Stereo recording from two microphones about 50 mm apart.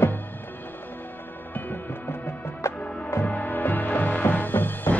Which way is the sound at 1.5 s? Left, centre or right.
Left.